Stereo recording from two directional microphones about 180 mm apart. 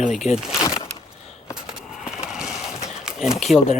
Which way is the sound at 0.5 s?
20° left (ahead or behind).